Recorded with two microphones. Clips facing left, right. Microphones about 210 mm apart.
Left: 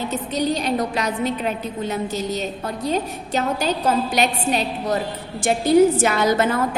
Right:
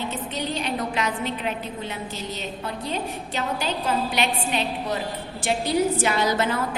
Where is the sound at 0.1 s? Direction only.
40° left (ahead or behind).